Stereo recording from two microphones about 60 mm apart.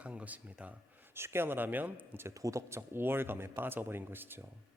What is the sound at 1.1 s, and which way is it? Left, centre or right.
Speech, right.